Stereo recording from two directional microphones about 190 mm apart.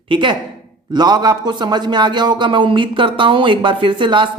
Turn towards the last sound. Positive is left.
turn(degrees=-25)  # may be behind; listen again after turning